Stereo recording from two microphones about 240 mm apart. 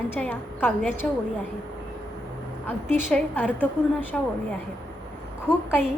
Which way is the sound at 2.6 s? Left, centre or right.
Centre.